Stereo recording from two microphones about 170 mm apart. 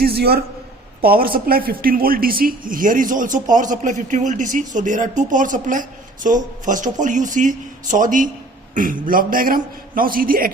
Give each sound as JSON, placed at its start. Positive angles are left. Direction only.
{"t": 0.0, "sound": "a man's voice", "side_deg": -70}